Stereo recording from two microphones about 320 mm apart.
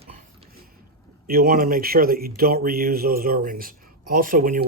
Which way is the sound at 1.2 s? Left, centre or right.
Right.